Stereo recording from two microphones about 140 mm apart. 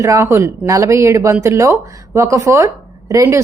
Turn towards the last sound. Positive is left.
turn(degrees=-20)  # may be behind; listen again after turning